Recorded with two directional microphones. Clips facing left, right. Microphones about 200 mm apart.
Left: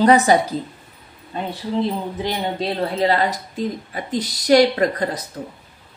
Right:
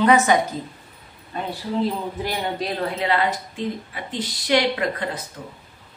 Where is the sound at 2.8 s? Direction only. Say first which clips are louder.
Left 3 dB; 35° left (ahead or behind).